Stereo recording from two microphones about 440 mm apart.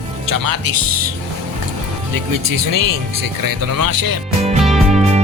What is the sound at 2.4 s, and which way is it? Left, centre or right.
Speech, right.